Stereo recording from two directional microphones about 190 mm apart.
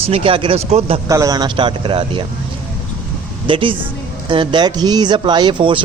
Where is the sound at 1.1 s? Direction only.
20° right (ahead or behind).